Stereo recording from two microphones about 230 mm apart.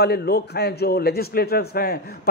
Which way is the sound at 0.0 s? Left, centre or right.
Left.